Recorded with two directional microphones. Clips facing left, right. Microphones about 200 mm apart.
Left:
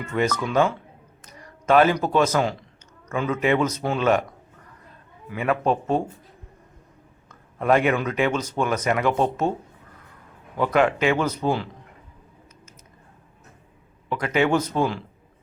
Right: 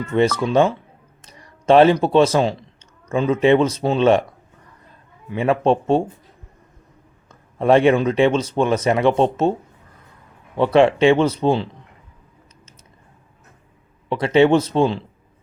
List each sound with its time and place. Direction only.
0.1 s a man's voice: 25° right (ahead or behind)
5.3 s speech: 25° right (ahead or behind)
7.3 s speech: 30° right (ahead or behind)
10.6 s speech: 30° right (ahead or behind)
14.1 s speech: 30° right (ahead or behind)